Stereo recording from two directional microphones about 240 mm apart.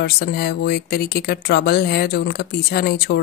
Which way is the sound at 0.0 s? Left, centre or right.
Left.